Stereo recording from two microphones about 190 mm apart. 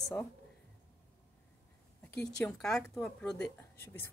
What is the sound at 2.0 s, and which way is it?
A woman's voice, 10° left (ahead or behind).